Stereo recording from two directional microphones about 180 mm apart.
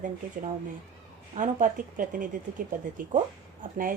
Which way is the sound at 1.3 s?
45° right (ahead or behind).